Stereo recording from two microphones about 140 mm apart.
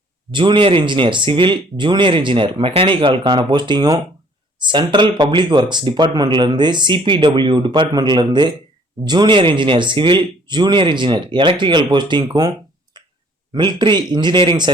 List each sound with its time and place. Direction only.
0.3 s speech: 35° right (ahead or behind)
12.9 s clicking: 30° right (ahead or behind)
13.5 s speech: 35° right (ahead or behind)